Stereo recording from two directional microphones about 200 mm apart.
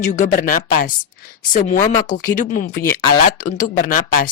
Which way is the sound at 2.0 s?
40° left (ahead or behind).